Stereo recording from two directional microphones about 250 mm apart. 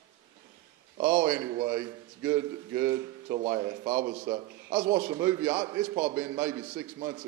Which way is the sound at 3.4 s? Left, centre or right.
Right.